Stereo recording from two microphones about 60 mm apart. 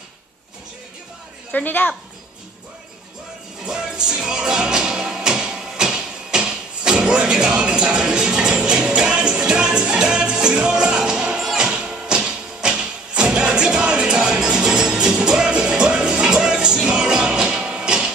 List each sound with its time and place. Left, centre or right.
1.5 s speech: left
3.6 s music: centre